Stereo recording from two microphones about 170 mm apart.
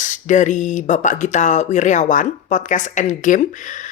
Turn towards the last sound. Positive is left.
turn(degrees=50)  # may be behind; listen again after turning